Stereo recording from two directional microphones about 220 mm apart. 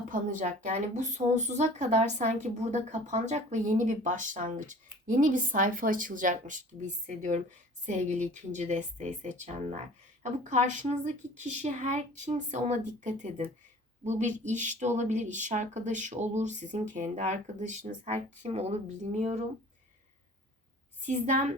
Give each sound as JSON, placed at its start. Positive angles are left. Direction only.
{"t": 0.1, "sound": "speech", "side_deg": -35}
{"t": 21.0, "sound": "speech", "side_deg": -35}